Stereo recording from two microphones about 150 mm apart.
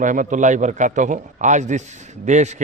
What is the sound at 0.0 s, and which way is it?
A man's voice, 60° right (ahead or behind).